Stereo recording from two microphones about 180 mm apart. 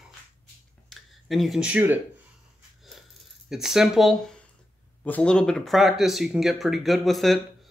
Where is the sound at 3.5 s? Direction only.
Centre (ahead or behind).